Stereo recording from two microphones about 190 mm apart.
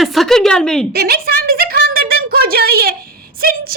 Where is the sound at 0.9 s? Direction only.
55° right (ahead or behind).